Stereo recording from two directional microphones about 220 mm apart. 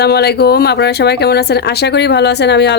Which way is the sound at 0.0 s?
45° left (ahead or behind).